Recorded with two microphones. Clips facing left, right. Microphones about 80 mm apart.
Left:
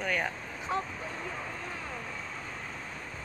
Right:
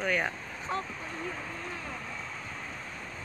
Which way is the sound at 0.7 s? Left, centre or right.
Centre.